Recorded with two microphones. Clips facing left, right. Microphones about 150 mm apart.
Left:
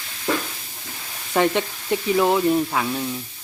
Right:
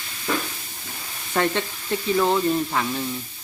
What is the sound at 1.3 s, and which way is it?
Speech, 15° left (ahead or behind).